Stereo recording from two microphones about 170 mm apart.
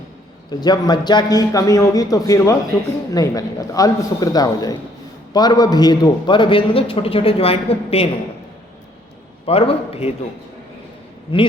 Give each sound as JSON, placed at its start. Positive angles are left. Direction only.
{"t": 0.6, "sound": "a man's voice", "side_deg": 25}
{"t": 9.5, "sound": "a man's voice", "side_deg": 35}
{"t": 11.3, "sound": "a man's voice", "side_deg": 30}